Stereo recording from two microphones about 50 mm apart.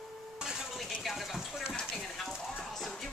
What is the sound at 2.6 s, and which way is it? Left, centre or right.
Music, centre.